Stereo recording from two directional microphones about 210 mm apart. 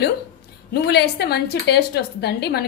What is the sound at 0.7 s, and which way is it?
A woman's voice, 50° left (ahead or behind).